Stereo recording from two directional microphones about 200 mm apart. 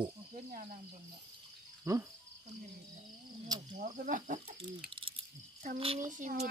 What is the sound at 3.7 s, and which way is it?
Speech, 40° right (ahead or behind).